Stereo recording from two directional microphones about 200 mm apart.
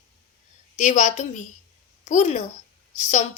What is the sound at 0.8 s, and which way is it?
A woman's voice, 35° left (ahead or behind).